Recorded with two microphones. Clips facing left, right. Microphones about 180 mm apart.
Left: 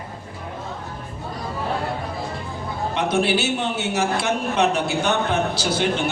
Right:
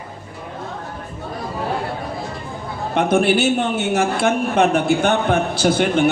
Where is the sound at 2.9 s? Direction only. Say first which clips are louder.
Right 5 dB; 50° right (ahead or behind).